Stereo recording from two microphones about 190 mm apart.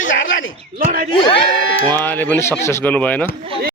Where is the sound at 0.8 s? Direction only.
50° right (ahead or behind).